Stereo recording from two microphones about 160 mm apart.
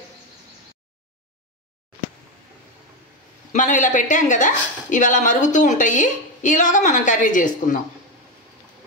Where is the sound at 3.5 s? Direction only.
55° left (ahead or behind).